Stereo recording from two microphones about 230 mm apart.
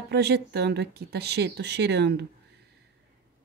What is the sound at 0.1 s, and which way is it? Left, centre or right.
Speech, right.